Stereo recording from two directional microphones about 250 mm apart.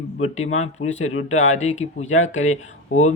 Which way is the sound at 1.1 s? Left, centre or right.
Left.